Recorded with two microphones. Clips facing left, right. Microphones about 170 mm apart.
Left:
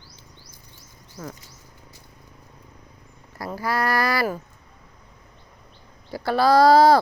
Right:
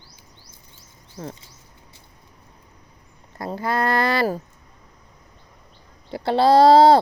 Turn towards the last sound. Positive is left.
turn(degrees=-25)  # may be behind; listen again after turning